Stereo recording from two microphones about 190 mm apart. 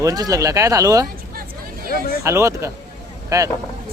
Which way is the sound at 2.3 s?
15° right (ahead or behind).